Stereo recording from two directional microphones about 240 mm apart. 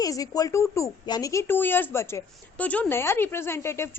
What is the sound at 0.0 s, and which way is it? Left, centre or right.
A woman's voice, centre.